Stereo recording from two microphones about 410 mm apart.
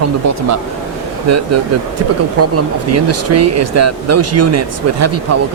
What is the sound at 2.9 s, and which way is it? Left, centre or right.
Speech, right.